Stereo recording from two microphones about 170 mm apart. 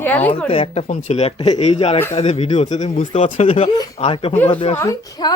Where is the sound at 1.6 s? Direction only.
40° left (ahead or behind).